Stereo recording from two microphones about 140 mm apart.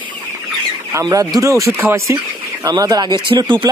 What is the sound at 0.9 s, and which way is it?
Speech, 25° right (ahead or behind).